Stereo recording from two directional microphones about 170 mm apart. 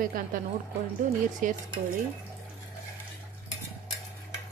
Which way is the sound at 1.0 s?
50° right (ahead or behind).